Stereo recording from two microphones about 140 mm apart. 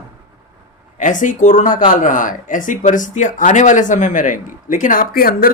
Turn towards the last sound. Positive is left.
turn(degrees=90)